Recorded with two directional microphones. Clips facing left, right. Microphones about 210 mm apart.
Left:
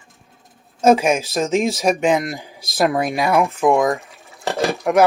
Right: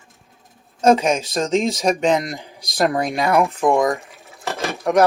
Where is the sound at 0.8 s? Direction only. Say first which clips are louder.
Left 1 dB; 10° left (ahead or behind).